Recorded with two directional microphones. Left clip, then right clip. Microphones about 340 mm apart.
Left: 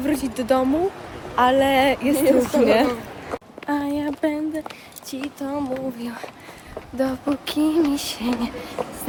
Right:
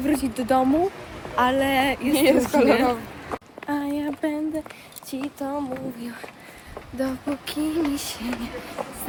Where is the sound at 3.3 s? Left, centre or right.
Centre.